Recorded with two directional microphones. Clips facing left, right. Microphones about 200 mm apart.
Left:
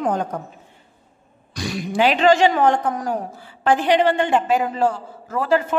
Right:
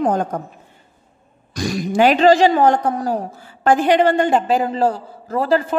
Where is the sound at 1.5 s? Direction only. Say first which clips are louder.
Right 4 dB; 45° right (ahead or behind).